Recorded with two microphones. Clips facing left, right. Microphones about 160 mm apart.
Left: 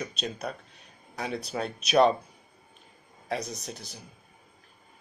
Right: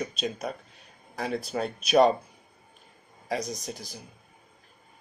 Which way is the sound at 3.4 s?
60° left (ahead or behind).